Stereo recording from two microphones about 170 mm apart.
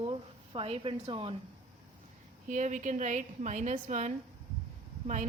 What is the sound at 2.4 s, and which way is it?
A woman's voice, 50° right (ahead or behind).